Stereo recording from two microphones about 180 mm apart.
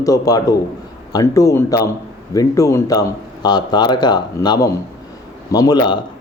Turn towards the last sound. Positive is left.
turn(degrees=25)  # may be behind; listen again after turning